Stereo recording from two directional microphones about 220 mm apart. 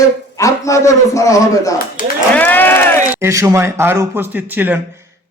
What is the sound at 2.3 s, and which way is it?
Speech, 10° left (ahead or behind).